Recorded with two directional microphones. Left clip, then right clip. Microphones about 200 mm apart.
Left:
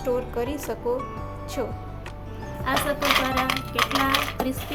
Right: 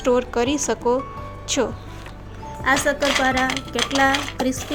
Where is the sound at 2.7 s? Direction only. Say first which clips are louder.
Right 6 dB; 35° right (ahead or behind).